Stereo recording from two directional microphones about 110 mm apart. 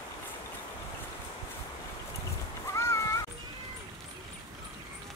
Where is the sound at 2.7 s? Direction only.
25° left (ahead or behind).